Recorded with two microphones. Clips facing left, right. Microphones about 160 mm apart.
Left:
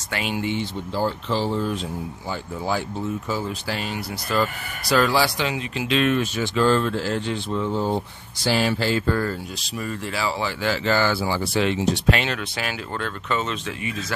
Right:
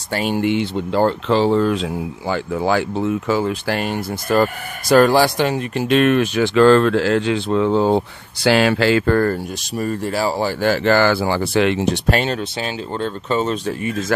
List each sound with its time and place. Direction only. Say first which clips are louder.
0.1 s speech: right 7 dB; 45° right (ahead or behind)
0.4 s speech: right 7 dB; 75° right (ahead or behind)
12.1 s speech: right 4 dB; 40° right (ahead or behind)